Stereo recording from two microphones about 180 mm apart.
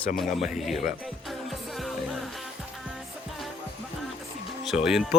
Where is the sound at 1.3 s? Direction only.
Centre (ahead or behind).